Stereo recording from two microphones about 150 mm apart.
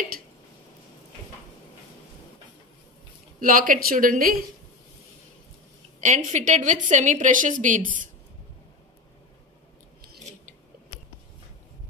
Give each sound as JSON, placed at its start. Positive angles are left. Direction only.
{"t": 3.3, "sound": "speech", "side_deg": -65}
{"t": 5.9, "sound": "a woman's voice", "side_deg": -55}